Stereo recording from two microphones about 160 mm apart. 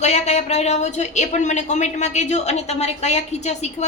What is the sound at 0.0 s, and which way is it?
A woman's voice, 45° left (ahead or behind).